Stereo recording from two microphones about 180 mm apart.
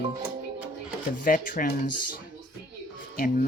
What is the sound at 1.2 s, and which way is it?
Speech, 50° left (ahead or behind).